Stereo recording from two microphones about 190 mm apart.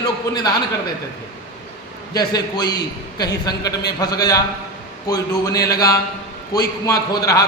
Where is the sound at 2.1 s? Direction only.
20° left (ahead or behind).